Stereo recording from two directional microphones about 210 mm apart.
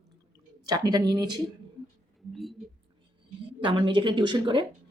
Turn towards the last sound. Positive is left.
turn(degrees=-20)  # may be behind; listen again after turning